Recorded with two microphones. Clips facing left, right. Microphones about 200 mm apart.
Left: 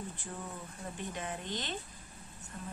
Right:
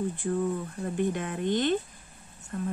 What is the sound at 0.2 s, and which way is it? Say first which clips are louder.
A woman's voice: right 15 dB; 65° right (ahead or behind).